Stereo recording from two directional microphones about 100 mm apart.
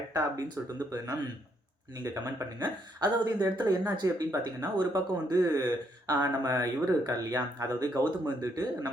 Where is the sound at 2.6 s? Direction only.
45° right (ahead or behind).